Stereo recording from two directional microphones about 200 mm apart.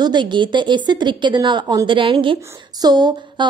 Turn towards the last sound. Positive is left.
turn(degrees=-20)  # may be behind; listen again after turning